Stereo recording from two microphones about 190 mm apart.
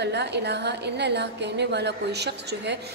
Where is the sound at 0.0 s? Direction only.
60° right (ahead or behind).